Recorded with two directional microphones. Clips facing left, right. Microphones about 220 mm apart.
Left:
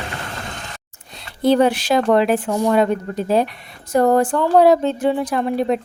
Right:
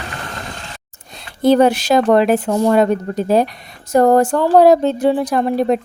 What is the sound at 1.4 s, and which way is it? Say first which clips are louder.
A woman's voice: right 3 dB; 45° right (ahead or behind).